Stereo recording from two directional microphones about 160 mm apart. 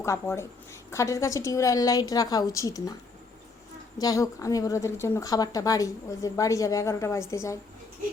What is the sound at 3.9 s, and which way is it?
A woman's voice, 20° left (ahead or behind).